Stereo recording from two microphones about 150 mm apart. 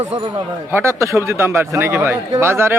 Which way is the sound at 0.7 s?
15° right (ahead or behind).